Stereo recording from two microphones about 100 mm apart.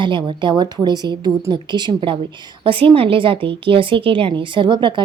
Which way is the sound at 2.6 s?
60° right (ahead or behind).